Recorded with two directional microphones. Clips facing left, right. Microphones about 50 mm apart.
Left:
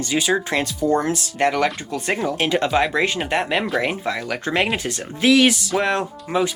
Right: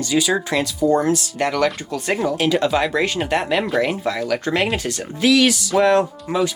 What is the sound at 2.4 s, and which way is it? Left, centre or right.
Speech, left.